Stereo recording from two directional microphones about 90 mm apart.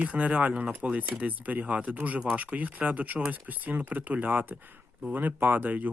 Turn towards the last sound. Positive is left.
turn(degrees=-20)  # may be behind; listen again after turning